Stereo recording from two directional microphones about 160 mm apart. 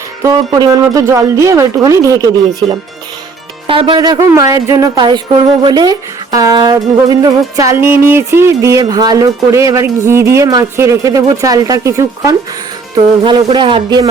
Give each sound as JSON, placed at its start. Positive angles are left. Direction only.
{"t": 0.2, "sound": "a woman's voice", "side_deg": -25}
{"t": 3.7, "sound": "a woman's voice", "side_deg": -30}
{"t": 13.2, "sound": "a man's voice", "side_deg": -30}